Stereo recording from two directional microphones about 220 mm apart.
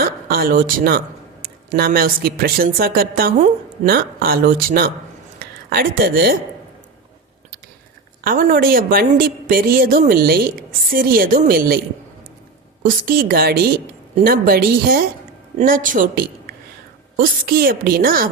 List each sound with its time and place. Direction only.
0.0 s a man's voice: 40° right (ahead or behind)
8.2 s a woman's voice: 40° right (ahead or behind)
12.8 s a woman's voice: 40° right (ahead or behind)